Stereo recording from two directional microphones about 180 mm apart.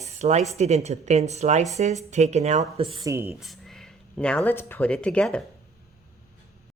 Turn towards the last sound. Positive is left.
turn(degrees=5)  # may be behind; listen again after turning